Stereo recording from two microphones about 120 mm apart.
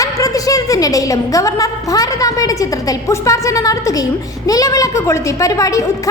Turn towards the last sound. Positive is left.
turn(degrees=25)  # may be behind; listen again after turning